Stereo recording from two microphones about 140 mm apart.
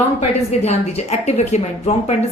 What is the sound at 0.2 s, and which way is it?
A woman's voice, 50° left (ahead or behind).